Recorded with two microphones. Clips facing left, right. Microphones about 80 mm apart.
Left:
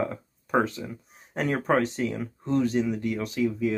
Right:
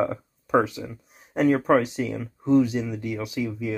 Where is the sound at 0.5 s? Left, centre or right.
Centre.